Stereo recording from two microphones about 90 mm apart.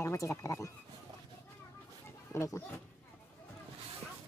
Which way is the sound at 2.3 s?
30° left (ahead or behind).